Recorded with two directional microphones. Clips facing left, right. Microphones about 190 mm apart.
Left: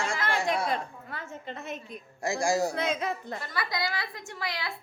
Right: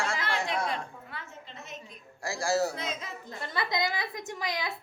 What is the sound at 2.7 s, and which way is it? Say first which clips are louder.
Speech: left 8 dB; 65° left (ahead or behind).